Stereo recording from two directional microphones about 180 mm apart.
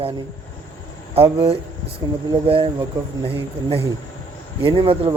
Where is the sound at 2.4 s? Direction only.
30° right (ahead or behind).